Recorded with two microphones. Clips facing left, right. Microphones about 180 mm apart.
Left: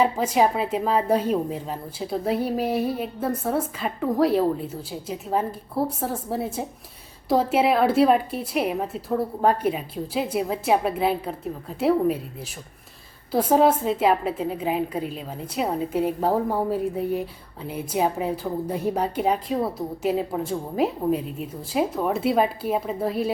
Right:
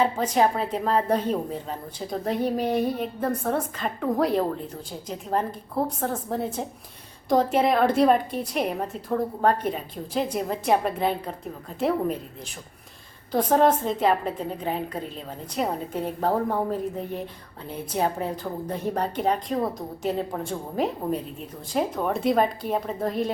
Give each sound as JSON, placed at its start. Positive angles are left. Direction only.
{"t": 0.0, "sound": "a woman's voice", "side_deg": 10}
{"t": 13.3, "sound": "a woman's voice", "side_deg": 5}